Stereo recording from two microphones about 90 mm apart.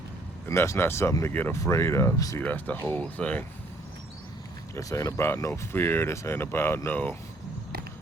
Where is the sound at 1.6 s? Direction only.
30° left (ahead or behind).